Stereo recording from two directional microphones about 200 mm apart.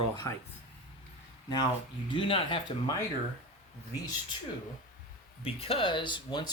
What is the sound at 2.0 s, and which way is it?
Speech, 25° left (ahead or behind).